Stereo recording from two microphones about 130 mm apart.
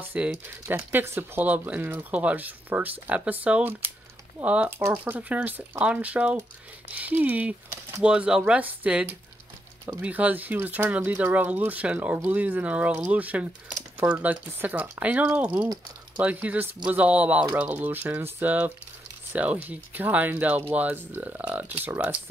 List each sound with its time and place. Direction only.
0.1 s speech: 10° right (ahead or behind)